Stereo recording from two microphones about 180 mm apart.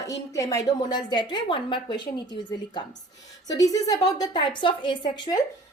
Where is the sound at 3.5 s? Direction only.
20° left (ahead or behind).